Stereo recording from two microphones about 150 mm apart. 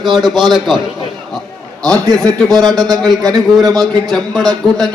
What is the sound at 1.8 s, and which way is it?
A man's voice, 5° left (ahead or behind).